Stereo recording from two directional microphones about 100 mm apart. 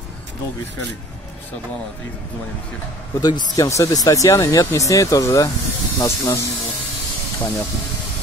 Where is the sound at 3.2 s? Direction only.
40° left (ahead or behind).